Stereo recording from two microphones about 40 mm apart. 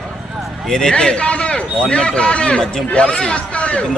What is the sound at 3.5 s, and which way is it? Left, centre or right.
Music, left.